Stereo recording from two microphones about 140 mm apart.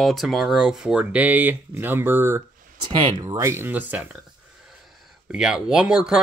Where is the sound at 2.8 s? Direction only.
30° right (ahead or behind); by 4.2 s 10° right (ahead or behind).